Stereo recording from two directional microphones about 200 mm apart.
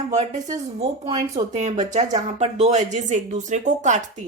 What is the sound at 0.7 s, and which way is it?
Speech, 25° right (ahead or behind).